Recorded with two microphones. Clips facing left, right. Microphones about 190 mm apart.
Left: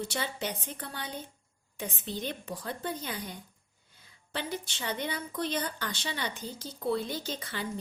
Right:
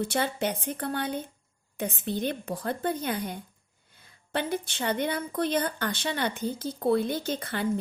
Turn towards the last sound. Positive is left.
turn(degrees=-55)  # may be behind; listen again after turning